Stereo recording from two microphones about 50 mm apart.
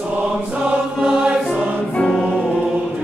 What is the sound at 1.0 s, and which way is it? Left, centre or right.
Choir, centre.